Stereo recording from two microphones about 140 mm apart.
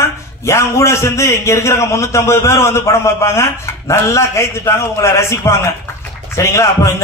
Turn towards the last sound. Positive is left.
turn(degrees=20)  # may be behind; listen again after turning